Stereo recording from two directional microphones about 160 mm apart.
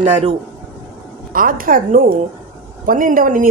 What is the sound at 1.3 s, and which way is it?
Speech, 60° right (ahead or behind).